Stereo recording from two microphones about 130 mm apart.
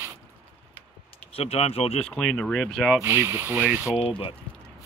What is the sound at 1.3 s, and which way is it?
Speech, 50° left (ahead or behind).